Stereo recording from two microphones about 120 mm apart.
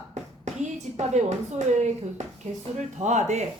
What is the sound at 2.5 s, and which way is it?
Speech, 65° right (ahead or behind).